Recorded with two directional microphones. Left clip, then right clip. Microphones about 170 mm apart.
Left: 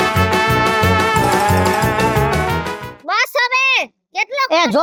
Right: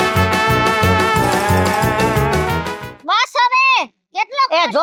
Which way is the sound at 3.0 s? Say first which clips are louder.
Right 2 dB; 35° left (ahead or behind).